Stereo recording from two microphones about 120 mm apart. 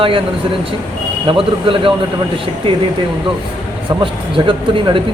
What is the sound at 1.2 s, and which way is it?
Speech, 45° right (ahead or behind).